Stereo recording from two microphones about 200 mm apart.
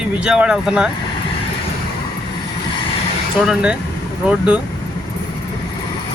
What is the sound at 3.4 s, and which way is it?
Speech, 5° right (ahead or behind).